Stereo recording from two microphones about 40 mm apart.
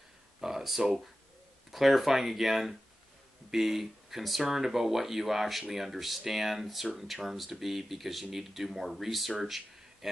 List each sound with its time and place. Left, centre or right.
0.4 s speech: centre